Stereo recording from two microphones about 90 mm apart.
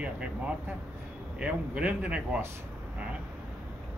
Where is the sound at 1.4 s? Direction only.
15° right (ahead or behind).